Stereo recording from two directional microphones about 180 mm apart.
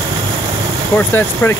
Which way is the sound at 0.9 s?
10° left (ahead or behind).